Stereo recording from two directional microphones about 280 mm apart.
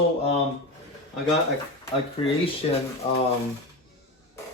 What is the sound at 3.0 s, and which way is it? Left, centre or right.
Speech, centre.